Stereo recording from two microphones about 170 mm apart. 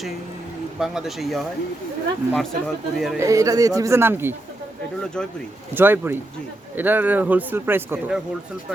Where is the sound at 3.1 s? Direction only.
20° right (ahead or behind).